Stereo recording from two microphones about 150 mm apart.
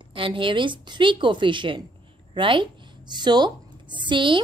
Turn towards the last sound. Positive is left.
turn(degrees=-35)  # may be behind; listen again after turning